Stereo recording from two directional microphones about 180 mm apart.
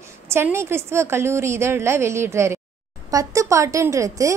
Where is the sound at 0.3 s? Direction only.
15° right (ahead or behind).